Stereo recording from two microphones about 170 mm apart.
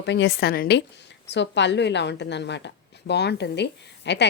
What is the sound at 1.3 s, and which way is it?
A woman's voice, 90° left.